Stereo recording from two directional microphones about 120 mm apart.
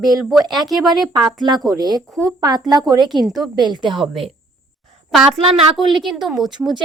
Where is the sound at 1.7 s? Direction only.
35° right (ahead or behind).